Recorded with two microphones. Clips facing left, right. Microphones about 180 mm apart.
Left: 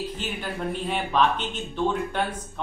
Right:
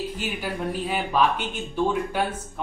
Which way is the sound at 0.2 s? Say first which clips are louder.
Right 2 dB; 5° right (ahead or behind).